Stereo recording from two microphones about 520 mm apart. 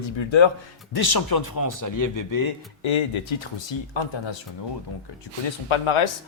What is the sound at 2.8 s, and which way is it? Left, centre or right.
Speech, left.